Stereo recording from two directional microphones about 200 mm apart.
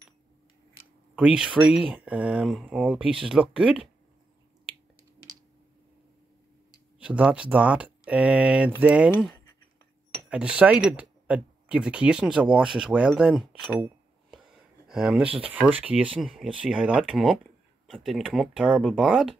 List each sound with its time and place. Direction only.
1.1 s speech: 5° right (ahead or behind)
7.0 s speech: 5° right (ahead or behind)
10.3 s speech: 5° right (ahead or behind)
15.2 s speech: 30° right (ahead or behind)
15.6 s speech: 5° right (ahead or behind)